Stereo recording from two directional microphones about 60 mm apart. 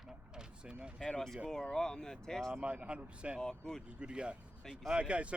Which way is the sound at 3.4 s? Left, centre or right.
Centre.